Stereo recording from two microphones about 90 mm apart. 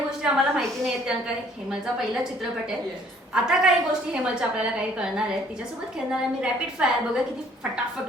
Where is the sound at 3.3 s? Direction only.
5° right (ahead or behind).